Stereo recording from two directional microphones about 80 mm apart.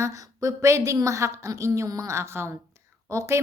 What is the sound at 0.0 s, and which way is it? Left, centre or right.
A woman's voice, right.